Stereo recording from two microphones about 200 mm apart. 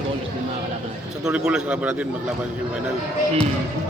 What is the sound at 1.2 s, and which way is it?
Speech, 5° right (ahead or behind).